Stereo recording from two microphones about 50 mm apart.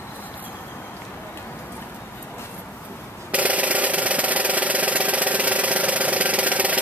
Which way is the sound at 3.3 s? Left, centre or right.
Right.